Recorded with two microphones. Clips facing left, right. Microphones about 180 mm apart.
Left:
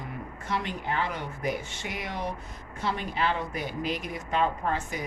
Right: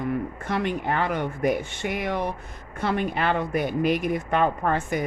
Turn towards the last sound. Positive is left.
turn(degrees=-55)  # may be behind; listen again after turning